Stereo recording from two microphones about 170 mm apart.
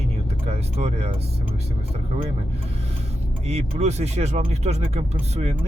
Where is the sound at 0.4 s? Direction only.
40° right (ahead or behind).